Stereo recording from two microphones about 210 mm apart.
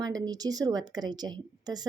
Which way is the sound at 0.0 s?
20° right (ahead or behind).